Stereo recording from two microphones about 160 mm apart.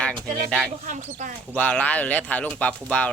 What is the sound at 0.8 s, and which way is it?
Speech, 50° right (ahead or behind).